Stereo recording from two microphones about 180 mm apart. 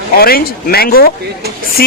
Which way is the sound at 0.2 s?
60° left (ahead or behind).